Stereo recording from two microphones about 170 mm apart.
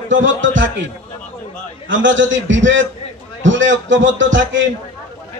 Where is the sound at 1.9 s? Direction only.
90° right.